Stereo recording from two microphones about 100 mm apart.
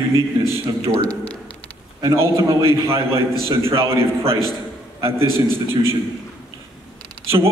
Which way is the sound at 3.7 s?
30° right (ahead or behind).